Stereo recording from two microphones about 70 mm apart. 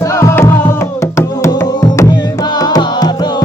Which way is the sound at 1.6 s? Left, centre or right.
Left.